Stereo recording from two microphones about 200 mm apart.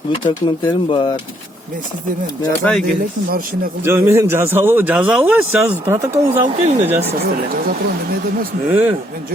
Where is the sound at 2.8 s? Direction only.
45° right (ahead or behind).